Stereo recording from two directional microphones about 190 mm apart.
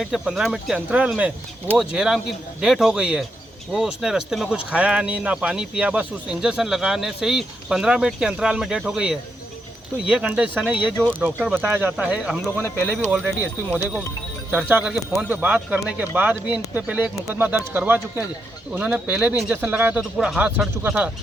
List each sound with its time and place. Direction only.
0.0 s speech: centre (ahead or behind)